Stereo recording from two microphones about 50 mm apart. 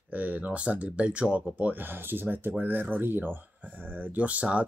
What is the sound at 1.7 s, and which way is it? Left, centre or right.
Speech, right.